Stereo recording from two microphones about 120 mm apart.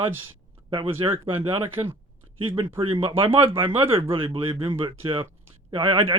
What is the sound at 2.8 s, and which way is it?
Speech, 45° right (ahead or behind).